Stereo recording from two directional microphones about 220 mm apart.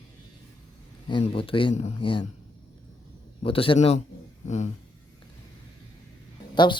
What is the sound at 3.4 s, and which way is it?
Speech, 25° left (ahead or behind).